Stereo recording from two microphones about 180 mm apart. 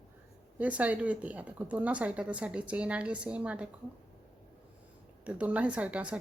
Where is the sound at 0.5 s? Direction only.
10° right (ahead or behind).